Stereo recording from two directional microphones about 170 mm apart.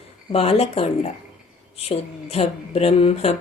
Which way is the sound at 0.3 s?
35° left (ahead or behind).